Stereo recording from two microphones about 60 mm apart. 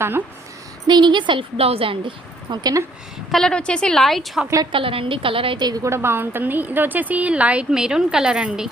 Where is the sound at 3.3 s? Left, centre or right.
Centre.